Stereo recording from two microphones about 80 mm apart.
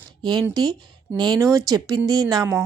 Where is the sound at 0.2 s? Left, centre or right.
Right.